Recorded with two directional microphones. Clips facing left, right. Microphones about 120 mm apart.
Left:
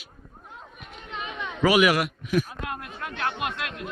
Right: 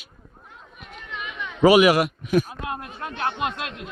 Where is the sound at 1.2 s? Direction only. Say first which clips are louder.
Left 1 dB; 30° left (ahead or behind).